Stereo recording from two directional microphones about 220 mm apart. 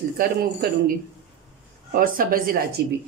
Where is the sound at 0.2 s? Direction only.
45° right (ahead or behind).